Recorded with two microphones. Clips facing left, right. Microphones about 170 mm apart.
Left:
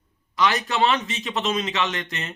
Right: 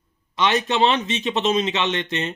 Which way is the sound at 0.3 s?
25° right (ahead or behind).